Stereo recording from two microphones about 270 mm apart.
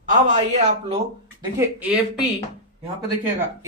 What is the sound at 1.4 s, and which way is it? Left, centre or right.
Speech, centre.